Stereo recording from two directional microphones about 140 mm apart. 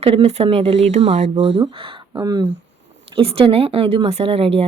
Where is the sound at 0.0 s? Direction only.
40° right (ahead or behind).